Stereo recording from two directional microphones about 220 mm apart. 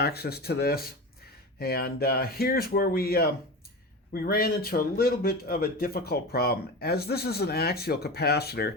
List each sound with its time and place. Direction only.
0.0 s speech: 45° left (ahead or behind)